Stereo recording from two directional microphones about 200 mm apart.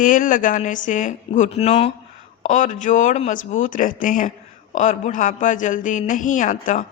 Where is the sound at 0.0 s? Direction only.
40° left (ahead or behind).